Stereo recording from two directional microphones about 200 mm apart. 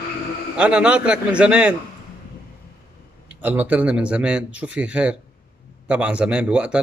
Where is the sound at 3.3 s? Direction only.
10° right (ahead or behind).